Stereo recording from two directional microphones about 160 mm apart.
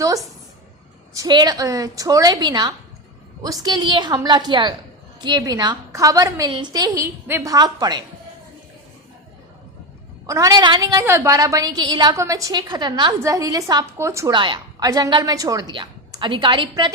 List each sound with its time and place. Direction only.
1.1 s a woman's voice: 25° right (ahead or behind)
10.2 s a woman's voice: 20° right (ahead or behind)
14.3 s a woman's voice: 30° right (ahead or behind)